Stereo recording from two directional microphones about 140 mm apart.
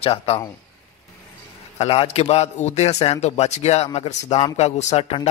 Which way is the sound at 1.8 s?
45° left (ahead or behind).